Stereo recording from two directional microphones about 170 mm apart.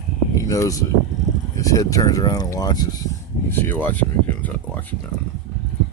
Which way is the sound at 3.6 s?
10° left (ahead or behind).